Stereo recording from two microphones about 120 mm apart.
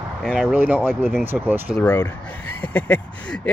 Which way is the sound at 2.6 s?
10° left (ahead or behind).